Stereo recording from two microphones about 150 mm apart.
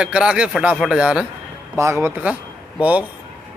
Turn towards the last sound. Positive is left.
turn(degrees=-10)  # may be behind; listen again after turning